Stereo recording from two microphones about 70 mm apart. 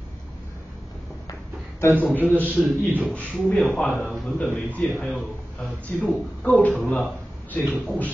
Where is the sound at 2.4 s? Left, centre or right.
Left.